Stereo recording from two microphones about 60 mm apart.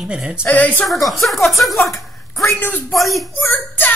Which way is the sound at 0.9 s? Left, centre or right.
Centre.